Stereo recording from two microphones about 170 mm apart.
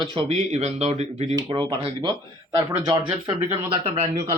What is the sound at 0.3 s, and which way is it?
Speech, 40° right (ahead or behind).